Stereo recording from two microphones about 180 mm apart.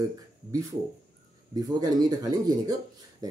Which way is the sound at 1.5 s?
20° right (ahead or behind).